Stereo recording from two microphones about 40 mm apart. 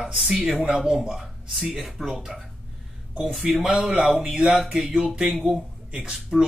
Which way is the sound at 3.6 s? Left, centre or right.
Right.